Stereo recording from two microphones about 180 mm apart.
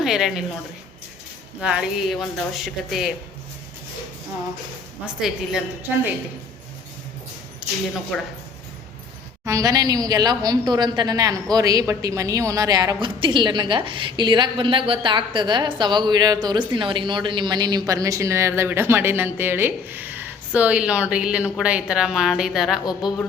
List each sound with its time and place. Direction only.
0.0 s a woman's voice: centre (ahead or behind)
1.6 s speech: 5° right (ahead or behind)
5.2 s speech: centre (ahead or behind)
7.6 s a sound: 5° right (ahead or behind)
9.4 s a woman's voice: 20° right (ahead or behind); by 22.8 s centre (ahead or behind)
22.9 s speech: 25° left (ahead or behind)